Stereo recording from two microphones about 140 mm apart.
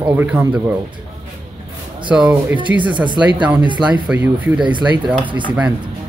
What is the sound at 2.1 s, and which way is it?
Speech, 10° right (ahead or behind).